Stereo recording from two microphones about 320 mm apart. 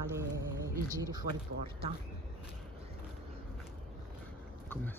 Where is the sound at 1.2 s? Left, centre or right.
Right.